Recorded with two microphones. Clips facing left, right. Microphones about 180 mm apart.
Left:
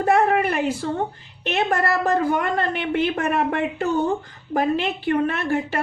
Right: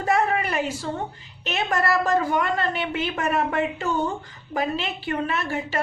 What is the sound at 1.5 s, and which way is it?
A woman's voice, 55° left (ahead or behind).